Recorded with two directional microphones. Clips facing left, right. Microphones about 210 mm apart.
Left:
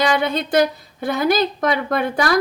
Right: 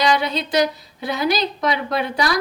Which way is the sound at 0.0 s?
55° left (ahead or behind).